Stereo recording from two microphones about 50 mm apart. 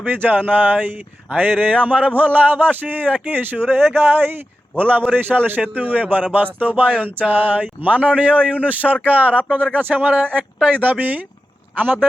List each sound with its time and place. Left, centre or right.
0.0 s a man's voice: right